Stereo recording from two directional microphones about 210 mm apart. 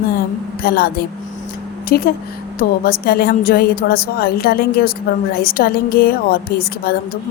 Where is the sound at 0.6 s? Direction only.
45° left (ahead or behind).